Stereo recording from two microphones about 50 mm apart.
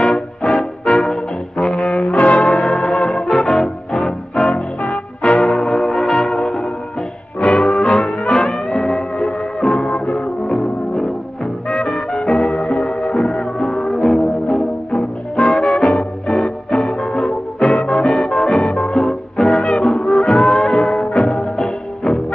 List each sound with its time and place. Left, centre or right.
0.0 s music: centre
1.9 s brass instrument: centre
2.3 s music: centre
4.6 s music: left
5.3 s music: centre
8.1 s music: centre
12.3 s music: centre
13.0 s music: centre
14.9 s music: centre
19.9 s music: centre